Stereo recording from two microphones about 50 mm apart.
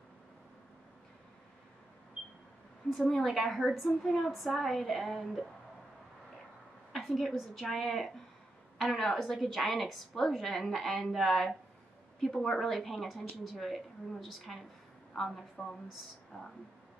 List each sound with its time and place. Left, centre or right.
2.9 s a woman's voice: centre
6.9 s a sound: centre
7.7 s a woman's voice: centre